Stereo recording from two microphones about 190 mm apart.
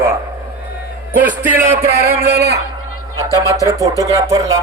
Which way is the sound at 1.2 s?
10° right (ahead or behind).